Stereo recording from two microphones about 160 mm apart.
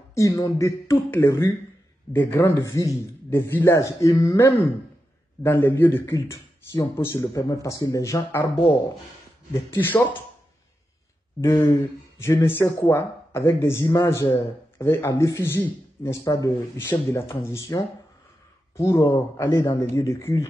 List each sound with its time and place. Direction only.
0.1 s a man's voice: 20° left (ahead or behind)
9.5 s a man's voice: 15° left (ahead or behind)
11.8 s a man's voice: 15° left (ahead or behind)